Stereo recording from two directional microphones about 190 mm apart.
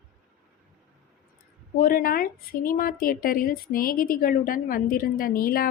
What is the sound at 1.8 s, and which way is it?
A woman's voice, 50° left (ahead or behind).